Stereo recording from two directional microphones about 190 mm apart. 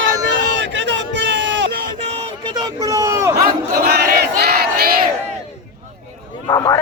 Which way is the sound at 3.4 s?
55° right (ahead or behind).